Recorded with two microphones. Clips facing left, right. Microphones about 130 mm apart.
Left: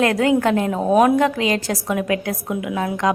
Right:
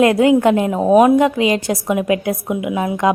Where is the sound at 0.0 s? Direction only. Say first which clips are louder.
Right 5 dB; 15° right (ahead or behind).